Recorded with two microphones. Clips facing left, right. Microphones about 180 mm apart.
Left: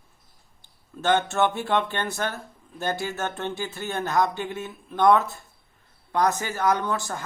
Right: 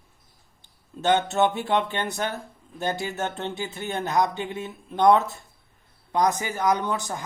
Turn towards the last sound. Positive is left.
turn(degrees=-15)  # may be behind; listen again after turning